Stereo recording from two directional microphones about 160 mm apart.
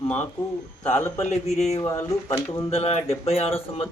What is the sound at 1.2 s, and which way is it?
Mantra, 45° left (ahead or behind).